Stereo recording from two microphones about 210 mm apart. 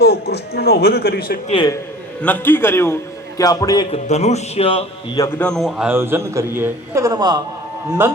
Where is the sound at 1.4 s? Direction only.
20° left (ahead or behind).